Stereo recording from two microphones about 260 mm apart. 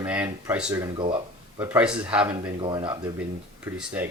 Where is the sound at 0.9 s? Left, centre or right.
Centre.